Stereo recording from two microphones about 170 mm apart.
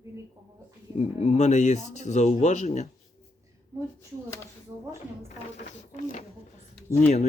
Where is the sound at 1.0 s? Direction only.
40° left (ahead or behind).